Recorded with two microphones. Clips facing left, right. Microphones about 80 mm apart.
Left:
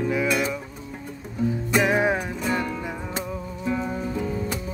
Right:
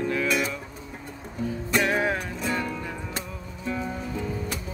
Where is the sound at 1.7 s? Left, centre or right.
Centre.